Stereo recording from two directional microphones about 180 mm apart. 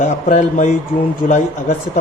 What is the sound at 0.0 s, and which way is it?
Speech, 40° left (ahead or behind).